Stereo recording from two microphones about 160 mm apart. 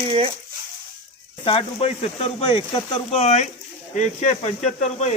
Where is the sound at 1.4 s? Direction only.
35° left (ahead or behind).